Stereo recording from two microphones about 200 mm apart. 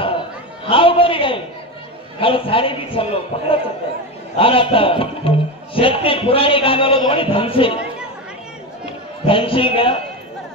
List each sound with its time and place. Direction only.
0.7 s a sound: 25° left (ahead or behind)
2.1 s a man's voice: 25° left (ahead or behind)
9.2 s a man's voice: 25° left (ahead or behind)